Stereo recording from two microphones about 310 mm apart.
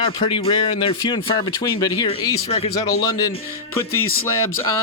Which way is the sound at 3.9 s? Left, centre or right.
Left.